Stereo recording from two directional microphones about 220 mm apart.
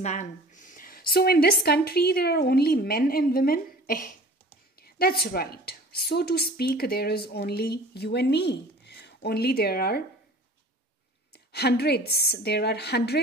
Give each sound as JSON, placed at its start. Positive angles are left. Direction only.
{"t": 0.0, "sound": "a woman's voice", "side_deg": 30}
{"t": 11.3, "sound": "a woman's voice", "side_deg": 45}